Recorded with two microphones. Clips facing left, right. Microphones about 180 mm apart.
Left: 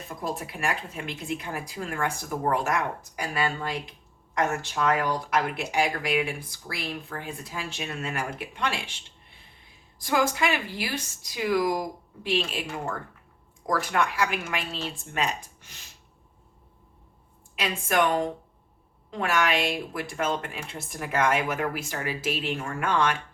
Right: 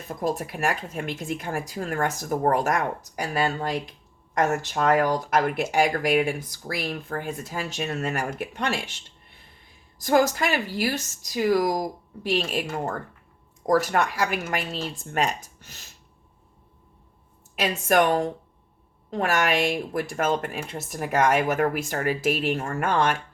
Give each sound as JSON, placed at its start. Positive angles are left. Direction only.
{"t": 0.1, "sound": "speech", "side_deg": -45}
{"t": 10.0, "sound": "speech", "side_deg": -45}
{"t": 17.5, "sound": "speech", "side_deg": -45}